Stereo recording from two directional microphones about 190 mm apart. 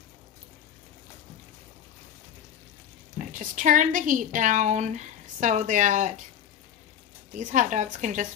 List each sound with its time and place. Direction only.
3.3 s a woman's voice: 45° right (ahead or behind)
7.3 s a woman's voice: 40° right (ahead or behind)